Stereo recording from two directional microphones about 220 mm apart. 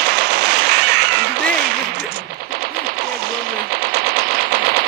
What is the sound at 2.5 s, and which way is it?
Machine gun, 45° right (ahead or behind).